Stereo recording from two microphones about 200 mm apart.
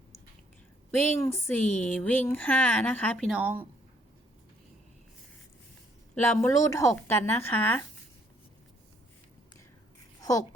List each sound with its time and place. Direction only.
0.9 s speech: 10° left (ahead or behind); by 3.7 s 10° right (ahead or behind)
6.1 s speech: 10° left (ahead or behind)
10.2 s a sound: 15° left (ahead or behind)